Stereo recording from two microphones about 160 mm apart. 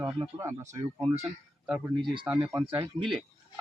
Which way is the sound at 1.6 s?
5° right (ahead or behind).